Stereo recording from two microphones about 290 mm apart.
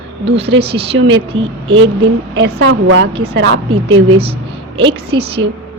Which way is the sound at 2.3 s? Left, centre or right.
Right.